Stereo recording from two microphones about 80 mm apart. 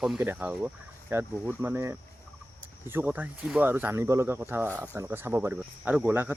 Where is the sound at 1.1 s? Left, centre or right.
Right.